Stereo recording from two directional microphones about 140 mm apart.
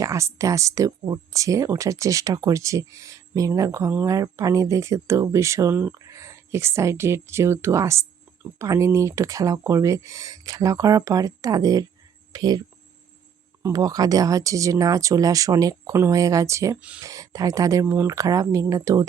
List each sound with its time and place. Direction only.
0.0 s speech: 20° right (ahead or behind)